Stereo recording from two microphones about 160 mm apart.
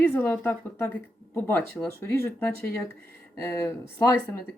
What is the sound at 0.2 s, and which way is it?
Speech, 10° left (ahead or behind).